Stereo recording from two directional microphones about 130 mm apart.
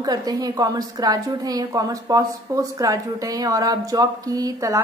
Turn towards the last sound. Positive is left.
turn(degrees=-25)  # may be behind; listen again after turning